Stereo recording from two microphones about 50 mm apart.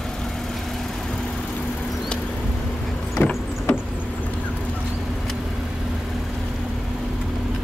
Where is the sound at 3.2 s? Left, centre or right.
Left.